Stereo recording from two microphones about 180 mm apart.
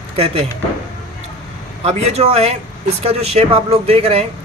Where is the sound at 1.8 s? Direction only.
35° right (ahead or behind).